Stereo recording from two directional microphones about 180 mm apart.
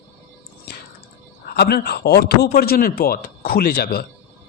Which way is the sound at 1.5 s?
60° left (ahead or behind).